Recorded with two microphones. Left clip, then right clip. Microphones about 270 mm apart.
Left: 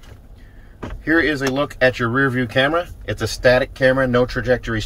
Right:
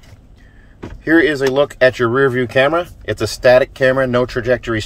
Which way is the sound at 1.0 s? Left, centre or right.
Centre.